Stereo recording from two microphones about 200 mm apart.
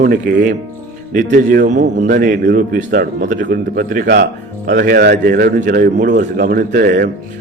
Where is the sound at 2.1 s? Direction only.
55° right (ahead or behind).